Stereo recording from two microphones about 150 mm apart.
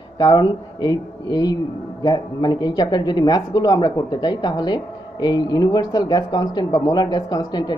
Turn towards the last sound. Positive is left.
turn(degrees=30)  # may be behind; listen again after turning